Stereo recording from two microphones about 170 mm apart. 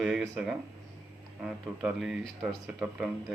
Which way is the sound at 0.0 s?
Centre (ahead or behind).